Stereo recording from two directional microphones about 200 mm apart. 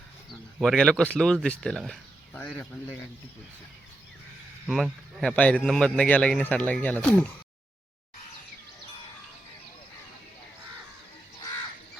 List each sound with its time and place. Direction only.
0.6 s speech: centre (ahead or behind)
4.6 s a man's voice: centre (ahead or behind)